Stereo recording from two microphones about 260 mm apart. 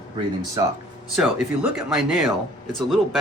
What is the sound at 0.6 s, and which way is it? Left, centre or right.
Speech, centre.